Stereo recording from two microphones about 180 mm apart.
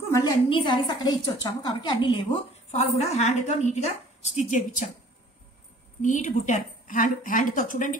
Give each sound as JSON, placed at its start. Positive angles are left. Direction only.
{"t": 0.1, "sound": "a woman's voice", "side_deg": 20}
{"t": 6.0, "sound": "a woman's voice", "side_deg": 45}